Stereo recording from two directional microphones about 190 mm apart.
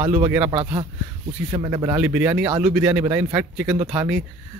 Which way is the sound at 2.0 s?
10° right (ahead or behind).